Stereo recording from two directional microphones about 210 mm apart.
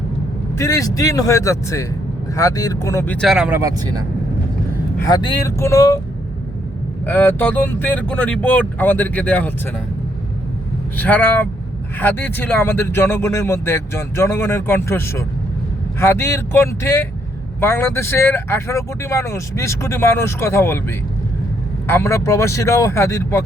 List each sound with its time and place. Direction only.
0.6 s speech: 15° left (ahead or behind); by 3.6 s 5° right (ahead or behind)
3.6 s speech: 15° right (ahead or behind)
4.9 s speech: 20° left (ahead or behind)
7.0 s speech: 10° left (ahead or behind)
10.9 s speech: 10° left (ahead or behind)
21.8 s speech: 10° left (ahead or behind)